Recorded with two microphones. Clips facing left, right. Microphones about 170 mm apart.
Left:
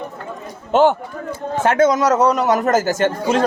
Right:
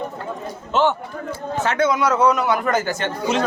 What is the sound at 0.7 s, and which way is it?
A man's voice, 50° left (ahead or behind).